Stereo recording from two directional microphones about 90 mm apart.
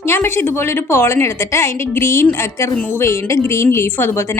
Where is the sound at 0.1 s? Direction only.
25° left (ahead or behind).